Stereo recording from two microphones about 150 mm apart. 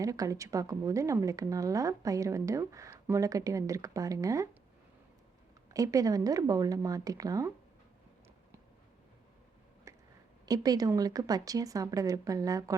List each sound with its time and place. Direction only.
0.0 s a woman's voice: 20° right (ahead or behind)
5.7 s a woman's voice: 20° right (ahead or behind)
9.9 s a sound: 20° right (ahead or behind)
10.4 s a woman's voice: 25° right (ahead or behind)